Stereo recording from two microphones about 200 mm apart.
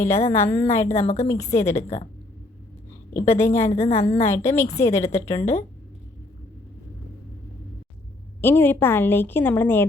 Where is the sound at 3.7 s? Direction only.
30° left (ahead or behind).